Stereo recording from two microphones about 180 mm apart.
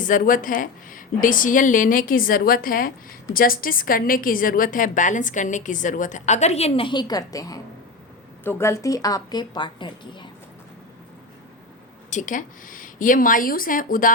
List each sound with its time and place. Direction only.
0.0 s a woman's voice: 50° left (ahead or behind); by 10.2 s 25° left (ahead or behind)
12.1 s a woman's voice: 45° left (ahead or behind)